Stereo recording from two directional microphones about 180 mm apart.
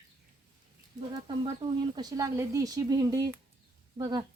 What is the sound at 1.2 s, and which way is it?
Speech, 25° right (ahead or behind).